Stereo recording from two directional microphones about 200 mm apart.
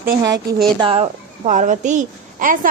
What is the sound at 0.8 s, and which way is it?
A woman's voice, 30° right (ahead or behind).